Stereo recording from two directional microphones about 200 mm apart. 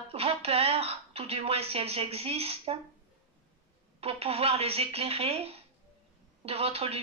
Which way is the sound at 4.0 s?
30° right (ahead or behind).